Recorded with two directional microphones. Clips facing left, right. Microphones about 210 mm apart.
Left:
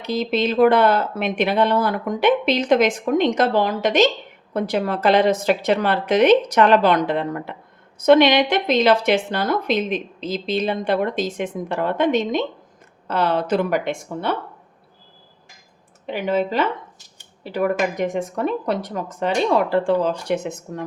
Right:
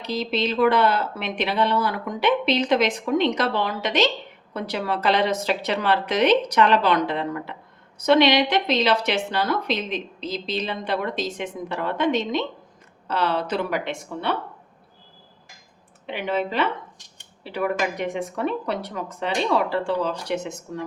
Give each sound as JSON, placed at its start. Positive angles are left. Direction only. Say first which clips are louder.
{"t": 0.1, "sound": "a woman's voice", "louder": "left 4 dB", "side_deg": 50}
{"t": 16.0, "sound": "a woman's voice", "louder": "left 4 dB", "side_deg": 40}